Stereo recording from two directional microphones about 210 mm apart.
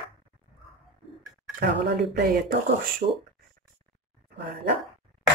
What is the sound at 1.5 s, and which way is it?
Speech, 55° right (ahead or behind).